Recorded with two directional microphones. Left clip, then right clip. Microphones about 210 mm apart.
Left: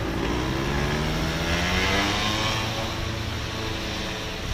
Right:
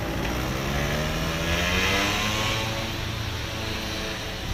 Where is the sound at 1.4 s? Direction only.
30° right (ahead or behind).